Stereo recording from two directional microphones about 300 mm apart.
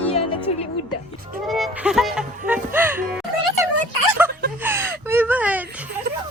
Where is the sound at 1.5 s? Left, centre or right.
Centre.